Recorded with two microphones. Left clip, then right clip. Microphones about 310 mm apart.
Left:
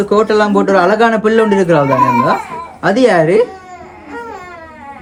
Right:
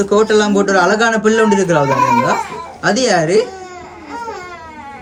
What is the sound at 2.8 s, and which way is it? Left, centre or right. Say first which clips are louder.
Speech: left 4 dB; centre.